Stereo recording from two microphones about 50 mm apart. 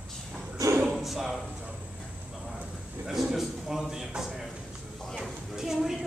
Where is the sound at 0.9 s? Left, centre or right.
Centre.